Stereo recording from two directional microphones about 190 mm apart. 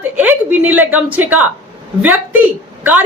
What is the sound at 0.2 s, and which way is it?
A woman's voice, 10° right (ahead or behind).